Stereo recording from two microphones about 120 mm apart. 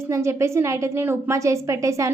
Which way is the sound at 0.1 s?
25° right (ahead or behind).